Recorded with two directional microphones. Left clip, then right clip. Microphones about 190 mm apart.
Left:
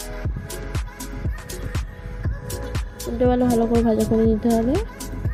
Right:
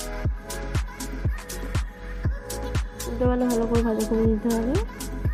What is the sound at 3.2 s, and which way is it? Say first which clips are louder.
Speech: left 5 dB; 30° left (ahead or behind).